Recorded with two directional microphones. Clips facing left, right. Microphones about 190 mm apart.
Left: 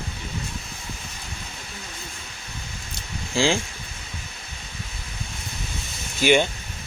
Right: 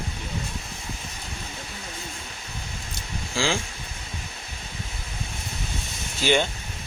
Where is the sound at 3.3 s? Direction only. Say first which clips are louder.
Left 4 dB; 20° left (ahead or behind).